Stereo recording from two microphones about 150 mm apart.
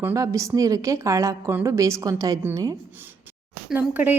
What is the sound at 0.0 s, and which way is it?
A woman's voice, 20° right (ahead or behind).